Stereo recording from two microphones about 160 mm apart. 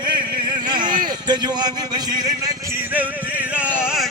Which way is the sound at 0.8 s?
55° right (ahead or behind).